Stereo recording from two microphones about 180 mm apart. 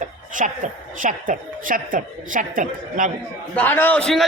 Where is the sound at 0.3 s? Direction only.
45° right (ahead or behind).